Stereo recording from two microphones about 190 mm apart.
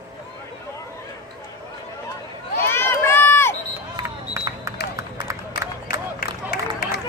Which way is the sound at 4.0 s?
20° right (ahead or behind).